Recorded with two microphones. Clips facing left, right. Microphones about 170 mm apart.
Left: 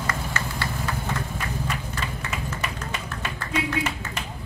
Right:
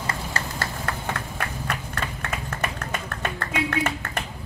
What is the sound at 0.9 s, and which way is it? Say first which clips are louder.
Vehicle: left 1 dB; 65° right (ahead or behind).